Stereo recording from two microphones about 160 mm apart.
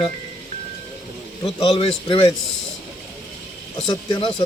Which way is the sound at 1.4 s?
35° left (ahead or behind).